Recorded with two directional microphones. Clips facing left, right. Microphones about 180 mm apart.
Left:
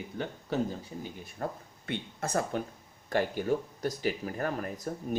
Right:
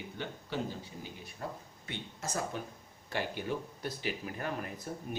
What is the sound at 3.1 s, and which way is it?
Speech, 45° left (ahead or behind).